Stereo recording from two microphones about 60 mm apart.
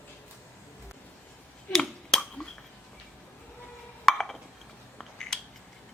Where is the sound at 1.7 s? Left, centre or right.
Centre.